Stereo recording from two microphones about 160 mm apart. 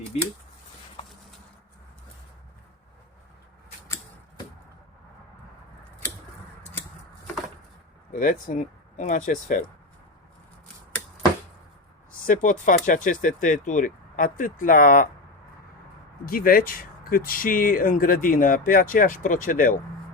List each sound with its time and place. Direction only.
1.0 s clip-clop: 30° left (ahead or behind)
8.1 s speech: 60° left (ahead or behind)
12.2 s speech: 55° left (ahead or behind)
16.2 s speech: 65° left (ahead or behind)